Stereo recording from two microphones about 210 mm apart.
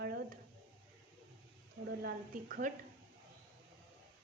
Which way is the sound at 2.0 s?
45° right (ahead or behind).